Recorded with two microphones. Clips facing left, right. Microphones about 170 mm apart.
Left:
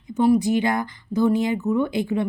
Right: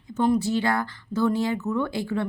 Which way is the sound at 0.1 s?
10° left (ahead or behind).